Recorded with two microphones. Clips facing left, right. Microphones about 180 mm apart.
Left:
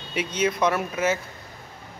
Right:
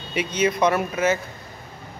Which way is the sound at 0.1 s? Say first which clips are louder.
Right 2 dB; centre (ahead or behind).